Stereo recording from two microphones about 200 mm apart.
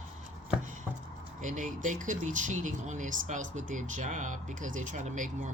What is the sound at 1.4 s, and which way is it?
Speech, 40° right (ahead or behind).